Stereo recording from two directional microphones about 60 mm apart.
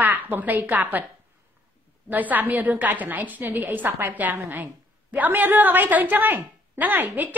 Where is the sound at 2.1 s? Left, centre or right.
Right.